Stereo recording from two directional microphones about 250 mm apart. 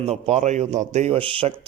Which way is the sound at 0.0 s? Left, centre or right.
Right.